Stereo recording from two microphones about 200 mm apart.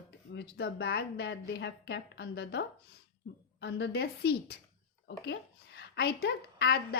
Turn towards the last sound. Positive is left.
turn(degrees=55)  # may be behind; listen again after turning